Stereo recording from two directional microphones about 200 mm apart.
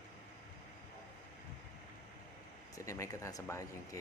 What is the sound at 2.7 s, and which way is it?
Speech, 15° left (ahead or behind).